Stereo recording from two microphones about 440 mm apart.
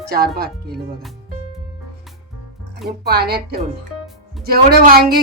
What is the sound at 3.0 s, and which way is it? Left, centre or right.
Speech, right.